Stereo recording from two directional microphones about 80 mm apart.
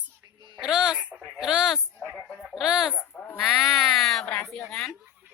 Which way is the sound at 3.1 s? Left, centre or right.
Centre.